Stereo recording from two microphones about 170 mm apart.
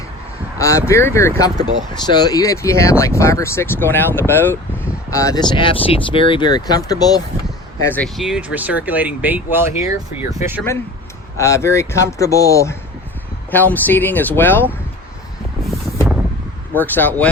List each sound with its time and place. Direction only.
0.6 s speech: 15° left (ahead or behind)
7.8 s speech: 10° left (ahead or behind); by 10.2 s 10° right (ahead or behind)
11.3 s speech: 15° left (ahead or behind)
15.6 s vehicle: centre (ahead or behind)
16.7 s speech: 10° left (ahead or behind)